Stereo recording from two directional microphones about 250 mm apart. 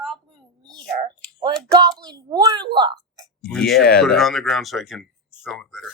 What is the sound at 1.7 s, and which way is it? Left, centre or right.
Speech, centre.